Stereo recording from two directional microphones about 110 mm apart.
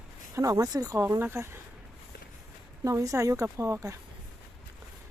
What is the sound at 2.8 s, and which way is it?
Speech, 30° right (ahead or behind).